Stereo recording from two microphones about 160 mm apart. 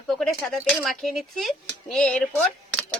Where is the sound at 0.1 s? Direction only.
Centre (ahead or behind).